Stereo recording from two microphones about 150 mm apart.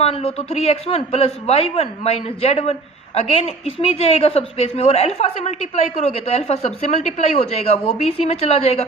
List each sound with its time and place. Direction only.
0.0 s a woman's voice: 40° left (ahead or behind)